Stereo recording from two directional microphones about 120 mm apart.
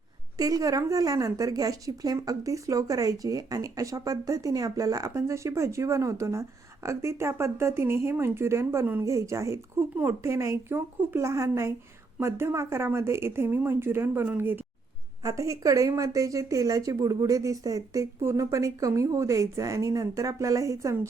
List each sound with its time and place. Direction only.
0.3 s speech: 30° right (ahead or behind)
15.2 s speech: 25° right (ahead or behind)